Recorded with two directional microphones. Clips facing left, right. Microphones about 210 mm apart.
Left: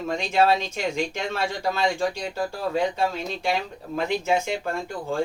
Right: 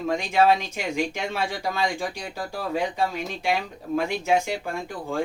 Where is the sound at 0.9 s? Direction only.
15° right (ahead or behind).